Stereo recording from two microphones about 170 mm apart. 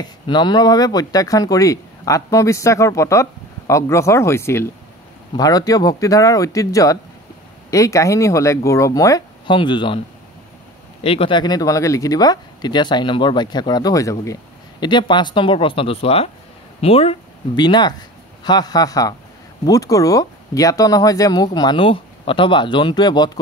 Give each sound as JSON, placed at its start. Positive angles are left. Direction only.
{"t": 0.0, "sound": "speech", "side_deg": 25}
{"t": 11.0, "sound": "speech", "side_deg": 35}